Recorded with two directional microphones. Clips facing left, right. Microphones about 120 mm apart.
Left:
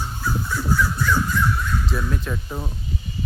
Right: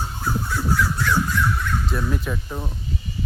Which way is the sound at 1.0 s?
80° right.